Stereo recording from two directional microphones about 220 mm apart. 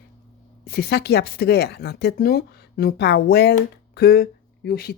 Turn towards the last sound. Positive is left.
turn(degrees=45)  # may be behind; listen again after turning